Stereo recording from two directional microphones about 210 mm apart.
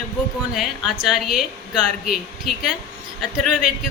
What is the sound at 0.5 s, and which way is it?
A woman's voice, centre (ahead or behind).